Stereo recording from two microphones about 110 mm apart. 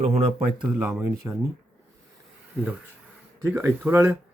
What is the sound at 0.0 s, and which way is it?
Speech, 75° right (ahead or behind).